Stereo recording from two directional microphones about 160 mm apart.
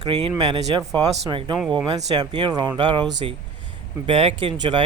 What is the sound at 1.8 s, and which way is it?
Speech, 25° right (ahead or behind).